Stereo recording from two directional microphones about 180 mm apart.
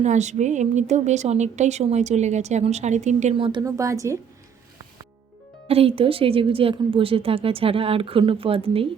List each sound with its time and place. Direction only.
0.0 s a woman's voice: 40° right (ahead or behind)
3.6 s a woman's voice: 15° right (ahead or behind)
5.6 s a woman's voice: 35° right (ahead or behind)